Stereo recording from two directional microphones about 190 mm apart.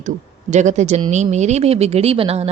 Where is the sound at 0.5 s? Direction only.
40° right (ahead or behind).